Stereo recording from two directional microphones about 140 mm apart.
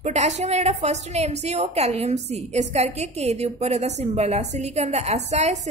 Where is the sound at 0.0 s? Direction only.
55° right (ahead or behind).